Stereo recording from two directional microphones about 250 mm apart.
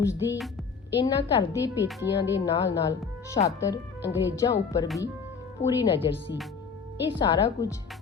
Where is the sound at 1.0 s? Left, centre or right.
Centre.